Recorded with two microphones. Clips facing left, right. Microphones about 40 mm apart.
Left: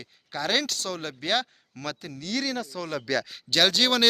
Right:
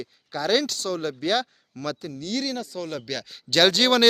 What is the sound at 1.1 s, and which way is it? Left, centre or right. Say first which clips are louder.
Speech: right 1 dB; left.